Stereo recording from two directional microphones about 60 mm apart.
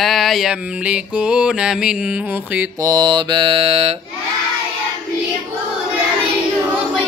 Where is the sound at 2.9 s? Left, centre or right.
Right.